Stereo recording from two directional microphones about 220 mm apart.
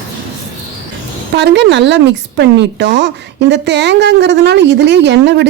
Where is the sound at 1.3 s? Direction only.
50° right (ahead or behind).